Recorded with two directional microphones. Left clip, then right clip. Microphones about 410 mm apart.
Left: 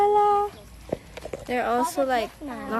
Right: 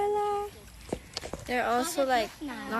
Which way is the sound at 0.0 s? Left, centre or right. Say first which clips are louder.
Left 9 dB; left.